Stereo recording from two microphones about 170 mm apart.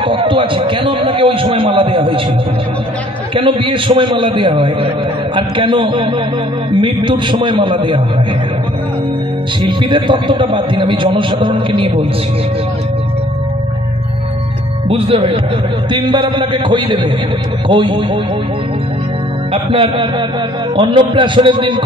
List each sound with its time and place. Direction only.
0.0 s a man's voice: 30° right (ahead or behind)
3.3 s a man's voice: 30° right (ahead or behind)
9.6 s a man's voice: 30° right (ahead or behind)
14.9 s a man's voice: 35° right (ahead or behind)
19.5 s a man's voice: 30° right (ahead or behind)